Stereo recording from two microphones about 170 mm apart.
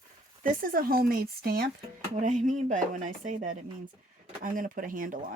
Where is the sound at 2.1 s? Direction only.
45° right (ahead or behind).